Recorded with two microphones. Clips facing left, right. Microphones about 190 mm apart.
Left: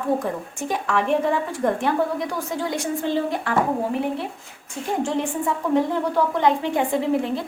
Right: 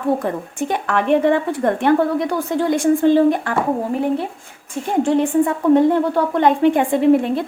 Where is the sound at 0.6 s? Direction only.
65° right (ahead or behind).